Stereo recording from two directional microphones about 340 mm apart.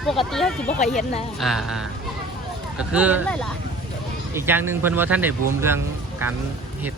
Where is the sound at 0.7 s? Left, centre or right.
Left.